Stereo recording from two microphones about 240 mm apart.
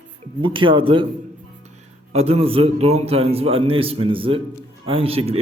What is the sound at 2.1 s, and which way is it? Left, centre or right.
A man's voice, right.